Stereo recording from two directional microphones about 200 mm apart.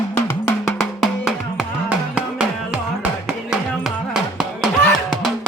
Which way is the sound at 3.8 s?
Centre (ahead or behind).